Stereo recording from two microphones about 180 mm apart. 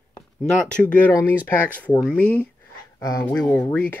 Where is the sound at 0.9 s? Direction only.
10° left (ahead or behind).